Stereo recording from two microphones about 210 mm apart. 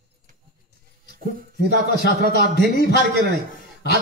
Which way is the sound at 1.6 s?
50° right (ahead or behind).